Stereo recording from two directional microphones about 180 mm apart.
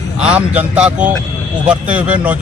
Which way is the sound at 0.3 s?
10° right (ahead or behind).